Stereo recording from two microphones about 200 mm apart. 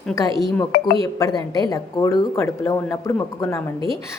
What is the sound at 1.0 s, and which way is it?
A woman's voice, 20° left (ahead or behind).